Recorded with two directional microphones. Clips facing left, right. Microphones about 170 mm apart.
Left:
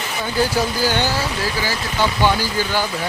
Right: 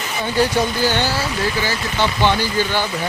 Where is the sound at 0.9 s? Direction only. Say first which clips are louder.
Even; 15° left (ahead or behind).